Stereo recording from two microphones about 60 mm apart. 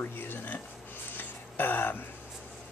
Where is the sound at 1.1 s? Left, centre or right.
Left.